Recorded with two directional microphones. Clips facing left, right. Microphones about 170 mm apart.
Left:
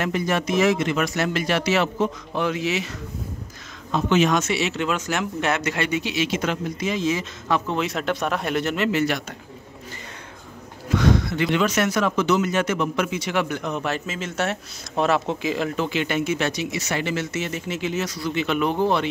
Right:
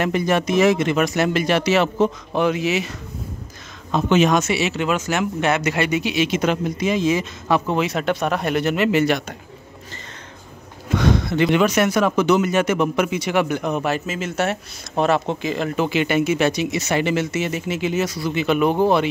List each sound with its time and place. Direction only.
0.0 s speech: 20° right (ahead or behind)
4.1 s speech: 15° right (ahead or behind)
7.7 s speech: centre (ahead or behind)
11.2 s speech: 25° right (ahead or behind)
11.6 s speech: 15° right (ahead or behind)